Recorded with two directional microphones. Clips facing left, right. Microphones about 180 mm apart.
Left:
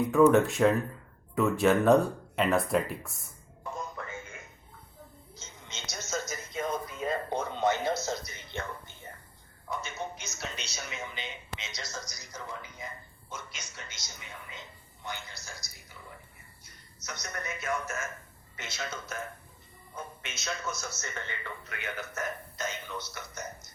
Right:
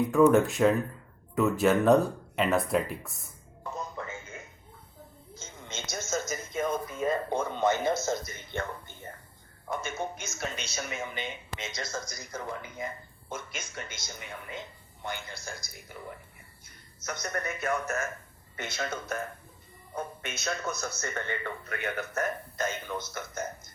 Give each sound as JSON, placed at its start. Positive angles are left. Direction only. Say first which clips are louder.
{"t": 0.1, "sound": "speech", "louder": "even", "side_deg": 0}
{"t": 5.3, "sound": "television", "louder": "right 7 dB", "side_deg": -50}
{"t": 9.6, "sound": "speech", "louder": "right 3 dB", "side_deg": -50}
{"t": 17.0, "sound": "speech", "louder": "right 6 dB", "side_deg": -50}
{"t": 20.2, "sound": "speech", "louder": "right 1 dB", "side_deg": -60}